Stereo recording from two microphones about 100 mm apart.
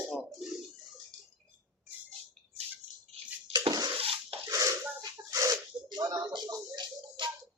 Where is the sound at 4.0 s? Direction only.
70° right (ahead or behind).